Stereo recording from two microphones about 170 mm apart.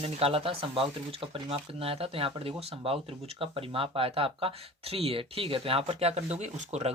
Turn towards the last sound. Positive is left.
turn(degrees=-40)  # may be behind; listen again after turning